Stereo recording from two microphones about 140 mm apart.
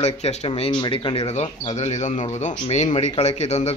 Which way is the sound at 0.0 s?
50° left (ahead or behind).